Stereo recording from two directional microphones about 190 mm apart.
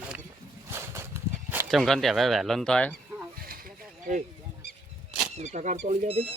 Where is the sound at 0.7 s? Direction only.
15° right (ahead or behind).